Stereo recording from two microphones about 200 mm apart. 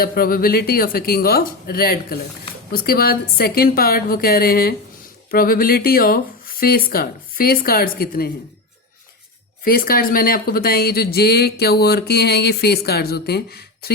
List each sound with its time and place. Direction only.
0.0 s speech: 45° left (ahead or behind)
9.6 s speech: 45° left (ahead or behind)